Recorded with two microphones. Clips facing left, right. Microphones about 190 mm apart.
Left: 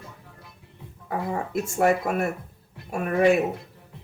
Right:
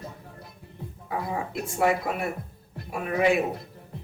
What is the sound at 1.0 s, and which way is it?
Speech, 45° left (ahead or behind).